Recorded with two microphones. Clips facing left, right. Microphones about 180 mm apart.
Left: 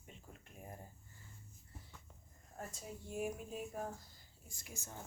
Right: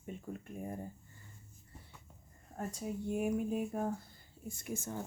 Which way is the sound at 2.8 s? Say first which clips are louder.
Right 7 dB; 55° right (ahead or behind).